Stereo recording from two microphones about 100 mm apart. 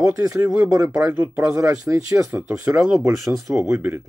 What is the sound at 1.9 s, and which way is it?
Speech, 15° right (ahead or behind).